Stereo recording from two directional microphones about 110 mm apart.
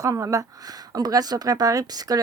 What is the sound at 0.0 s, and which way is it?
Speech, 30° right (ahead or behind).